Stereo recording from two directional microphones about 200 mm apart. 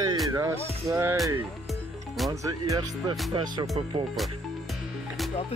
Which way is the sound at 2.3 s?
15° right (ahead or behind).